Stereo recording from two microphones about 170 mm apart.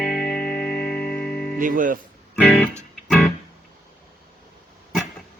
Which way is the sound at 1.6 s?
50° right (ahead or behind).